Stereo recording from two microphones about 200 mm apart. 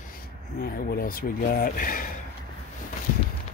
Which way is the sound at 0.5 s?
45° left (ahead or behind).